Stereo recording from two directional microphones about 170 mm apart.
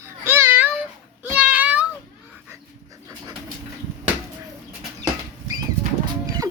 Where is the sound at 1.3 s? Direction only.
10° right (ahead or behind).